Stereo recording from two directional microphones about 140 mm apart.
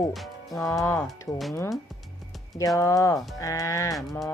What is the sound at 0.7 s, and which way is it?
Speech, 20° left (ahead or behind).